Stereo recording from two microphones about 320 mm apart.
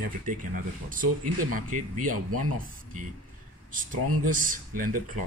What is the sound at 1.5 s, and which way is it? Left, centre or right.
Speech, right.